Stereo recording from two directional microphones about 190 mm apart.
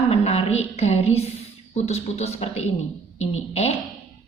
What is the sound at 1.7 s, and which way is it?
Speech, 35° left (ahead or behind).